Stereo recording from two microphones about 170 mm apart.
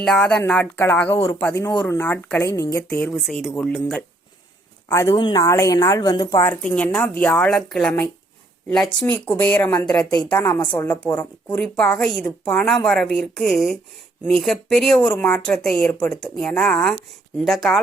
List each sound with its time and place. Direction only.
0.0 s speech: 5° left (ahead or behind)
2.9 s a woman's voice: centre (ahead or behind)
4.9 s speech: 15° left (ahead or behind)
6.5 s a woman's voice: 5° left (ahead or behind)